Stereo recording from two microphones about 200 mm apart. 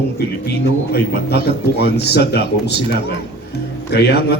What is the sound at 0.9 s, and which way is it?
A man's voice, 55° left (ahead or behind).